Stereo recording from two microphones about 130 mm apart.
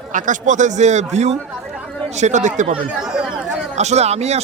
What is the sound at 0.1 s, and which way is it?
A man's voice, 80° right.